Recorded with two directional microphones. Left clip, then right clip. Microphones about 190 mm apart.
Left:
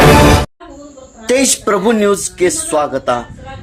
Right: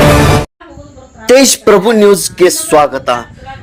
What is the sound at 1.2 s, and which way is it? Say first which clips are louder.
A man's voice: right 7 dB; 30° right (ahead or behind).